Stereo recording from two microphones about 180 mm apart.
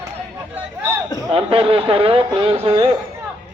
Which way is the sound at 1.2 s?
30° right (ahead or behind).